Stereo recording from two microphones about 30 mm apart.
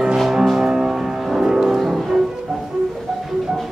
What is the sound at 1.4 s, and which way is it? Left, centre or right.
Music, right.